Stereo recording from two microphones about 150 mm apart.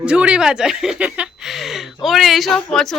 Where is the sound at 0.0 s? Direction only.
5° right (ahead or behind).